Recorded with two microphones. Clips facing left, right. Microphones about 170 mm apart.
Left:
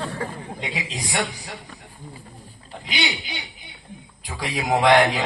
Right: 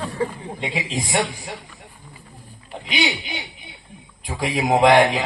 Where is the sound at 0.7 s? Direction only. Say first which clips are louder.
Right 6 dB; 25° right (ahead or behind).